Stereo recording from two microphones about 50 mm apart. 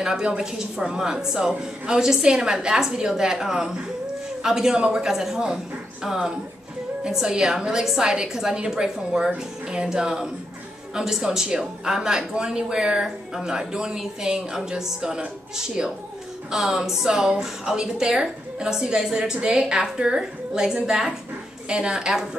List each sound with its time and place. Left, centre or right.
0.0 s a man's voice: centre